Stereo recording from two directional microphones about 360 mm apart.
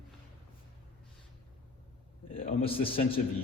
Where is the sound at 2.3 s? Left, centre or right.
Centre.